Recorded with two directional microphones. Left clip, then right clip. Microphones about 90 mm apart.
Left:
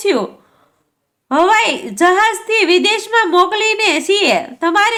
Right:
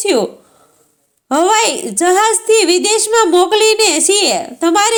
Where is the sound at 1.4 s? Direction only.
40° right (ahead or behind).